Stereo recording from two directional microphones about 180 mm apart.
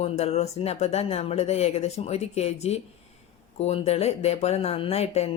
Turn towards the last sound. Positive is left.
turn(degrees=35)  # may be behind; listen again after turning